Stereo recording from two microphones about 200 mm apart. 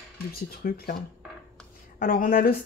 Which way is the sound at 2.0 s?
45° left (ahead or behind).